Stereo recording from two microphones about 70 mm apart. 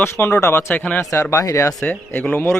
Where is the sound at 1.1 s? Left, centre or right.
Left.